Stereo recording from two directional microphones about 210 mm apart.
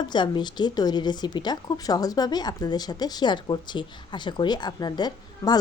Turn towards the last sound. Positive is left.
turn(degrees=20)  # may be behind; listen again after turning